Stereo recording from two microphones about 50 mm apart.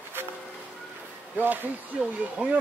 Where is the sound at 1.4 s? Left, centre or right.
Right.